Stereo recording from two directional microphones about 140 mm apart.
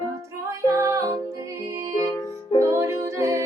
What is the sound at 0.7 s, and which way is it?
Music, 20° right (ahead or behind).